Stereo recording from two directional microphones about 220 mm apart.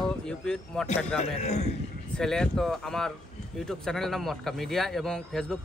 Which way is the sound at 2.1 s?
5° left (ahead or behind).